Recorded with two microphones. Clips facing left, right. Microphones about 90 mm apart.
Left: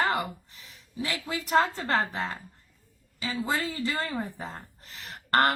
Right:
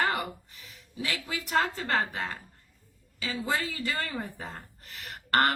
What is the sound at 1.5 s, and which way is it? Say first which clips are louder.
Speech: left 3 dB; 30° left (ahead or behind).